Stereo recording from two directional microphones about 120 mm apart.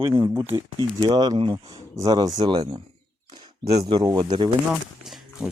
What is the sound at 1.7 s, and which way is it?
A man's voice, 30° right (ahead or behind).